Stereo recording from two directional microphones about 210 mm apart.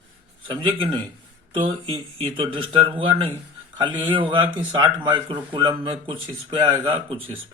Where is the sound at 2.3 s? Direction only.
25° right (ahead or behind).